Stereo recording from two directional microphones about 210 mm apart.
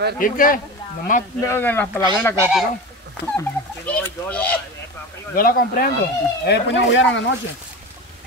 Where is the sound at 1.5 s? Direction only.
10° left (ahead or behind).